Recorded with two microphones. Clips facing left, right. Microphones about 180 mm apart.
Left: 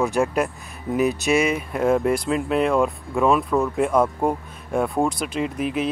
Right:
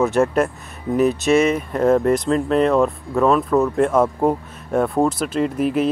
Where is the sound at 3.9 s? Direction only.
5° right (ahead or behind).